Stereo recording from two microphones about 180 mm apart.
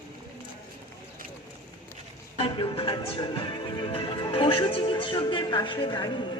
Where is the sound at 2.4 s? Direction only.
30° left (ahead or behind).